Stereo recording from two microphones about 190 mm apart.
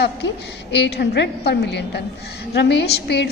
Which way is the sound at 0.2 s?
65° left (ahead or behind).